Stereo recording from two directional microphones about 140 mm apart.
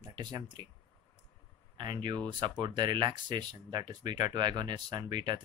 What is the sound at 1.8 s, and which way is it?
Speech, 35° right (ahead or behind).